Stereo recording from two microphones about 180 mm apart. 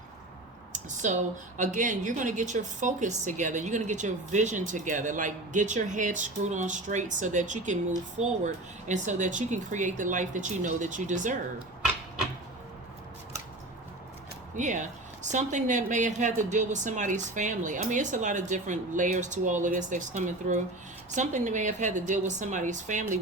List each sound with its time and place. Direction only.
0.7 s a woman's voice: 45° right (ahead or behind)
8.9 s a woman's voice: 45° right (ahead or behind)
14.5 s a woman's voice: 45° right (ahead or behind)